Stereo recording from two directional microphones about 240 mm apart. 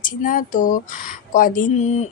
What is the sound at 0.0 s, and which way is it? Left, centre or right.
Speech, left.